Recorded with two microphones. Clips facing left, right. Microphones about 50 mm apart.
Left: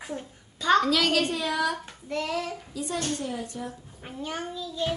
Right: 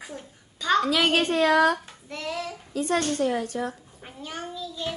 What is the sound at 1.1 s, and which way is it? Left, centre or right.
Speech, right.